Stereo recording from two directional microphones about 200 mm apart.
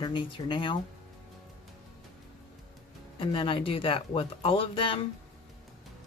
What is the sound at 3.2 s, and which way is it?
Speech, 25° left (ahead or behind).